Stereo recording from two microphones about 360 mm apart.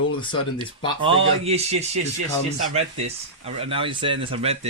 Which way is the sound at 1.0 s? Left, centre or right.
Centre.